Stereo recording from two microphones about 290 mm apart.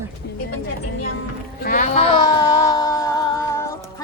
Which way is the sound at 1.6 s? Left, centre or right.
Left.